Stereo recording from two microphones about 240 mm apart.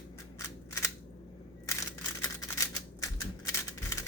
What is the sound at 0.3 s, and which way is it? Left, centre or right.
Cap gun, centre.